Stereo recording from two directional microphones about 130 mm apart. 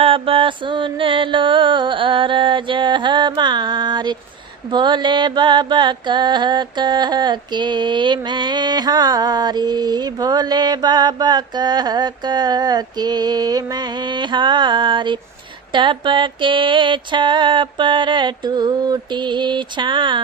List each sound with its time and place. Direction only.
0.0 s mantra: 45° right (ahead or behind)